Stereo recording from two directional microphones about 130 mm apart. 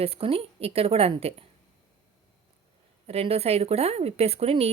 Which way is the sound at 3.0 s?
50° right (ahead or behind).